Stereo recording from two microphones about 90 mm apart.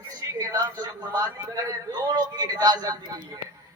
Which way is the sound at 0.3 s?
40° right (ahead or behind).